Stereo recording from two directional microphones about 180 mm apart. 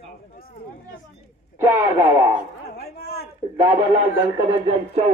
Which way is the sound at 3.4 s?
20° right (ahead or behind).